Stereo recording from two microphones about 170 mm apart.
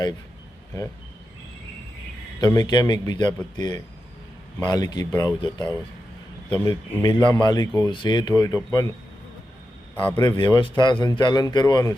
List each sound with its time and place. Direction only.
2.4 s speech: 25° left (ahead or behind)
7.0 s speech: 25° left (ahead or behind)
10.2 s speech: 25° left (ahead or behind)